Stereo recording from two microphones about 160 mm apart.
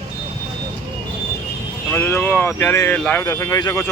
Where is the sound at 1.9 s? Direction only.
15° left (ahead or behind).